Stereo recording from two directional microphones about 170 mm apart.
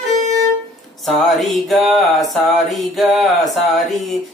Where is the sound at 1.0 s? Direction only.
Centre (ahead or behind).